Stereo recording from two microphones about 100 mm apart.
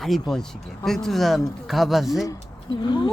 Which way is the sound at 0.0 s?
Centre (ahead or behind).